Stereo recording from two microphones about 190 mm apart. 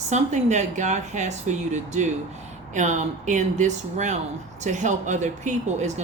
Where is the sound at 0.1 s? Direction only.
35° right (ahead or behind).